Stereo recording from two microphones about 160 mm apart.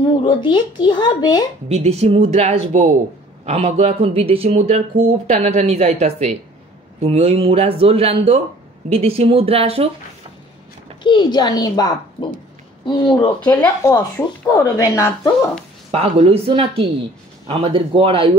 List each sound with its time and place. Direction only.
0.0 s speech: 30° left (ahead or behind)
1.7 s speech: 40° right (ahead or behind)
11.0 s speech: 30° left (ahead or behind)
15.9 s speech: 40° right (ahead or behind)